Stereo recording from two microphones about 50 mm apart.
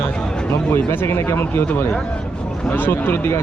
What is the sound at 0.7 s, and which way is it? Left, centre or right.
Speech, left.